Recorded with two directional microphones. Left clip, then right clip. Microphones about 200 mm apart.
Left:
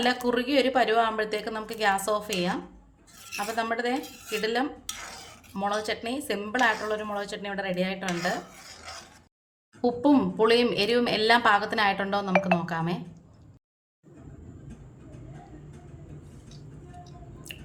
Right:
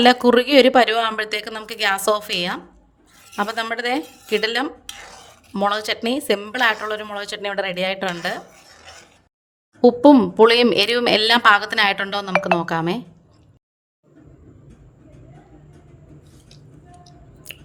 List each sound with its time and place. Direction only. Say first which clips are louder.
0.0 s a woman's voice: right 12 dB; 55° right (ahead or behind)
9.8 s a woman's voice: right 11 dB; 45° right (ahead or behind)
17.0 s a sound: even; 45° right (ahead or behind)